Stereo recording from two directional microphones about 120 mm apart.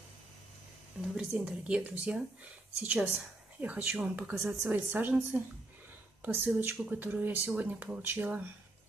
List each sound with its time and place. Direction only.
1.1 s speech: 10° right (ahead or behind)